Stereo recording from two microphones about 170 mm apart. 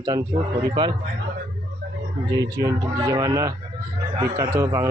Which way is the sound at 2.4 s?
20° right (ahead or behind).